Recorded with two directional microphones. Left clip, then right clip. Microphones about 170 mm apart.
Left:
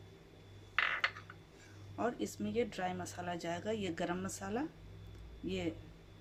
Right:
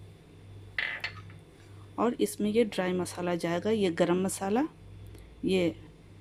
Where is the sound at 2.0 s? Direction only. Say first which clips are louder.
Right 9 dB; 50° right (ahead or behind).